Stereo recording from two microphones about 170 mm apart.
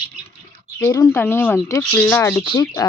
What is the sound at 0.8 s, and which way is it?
Speech, 15° left (ahead or behind).